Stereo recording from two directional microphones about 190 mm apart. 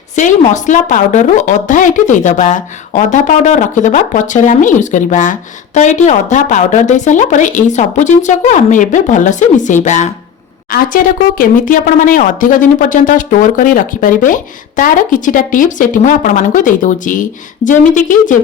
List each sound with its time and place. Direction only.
0.2 s a woman's voice: 40° left (ahead or behind)